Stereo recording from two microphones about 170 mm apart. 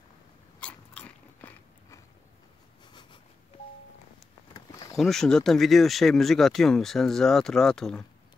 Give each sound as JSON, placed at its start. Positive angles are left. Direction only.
{"t": 0.6, "sound": "biting", "side_deg": 5}
{"t": 2.9, "sound": "a sound", "side_deg": 25}
{"t": 4.9, "sound": "speech", "side_deg": 0}